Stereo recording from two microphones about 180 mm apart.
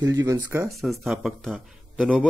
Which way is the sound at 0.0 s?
20° right (ahead or behind).